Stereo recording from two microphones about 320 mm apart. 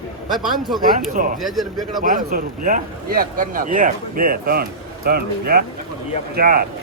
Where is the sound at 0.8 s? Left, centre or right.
Right.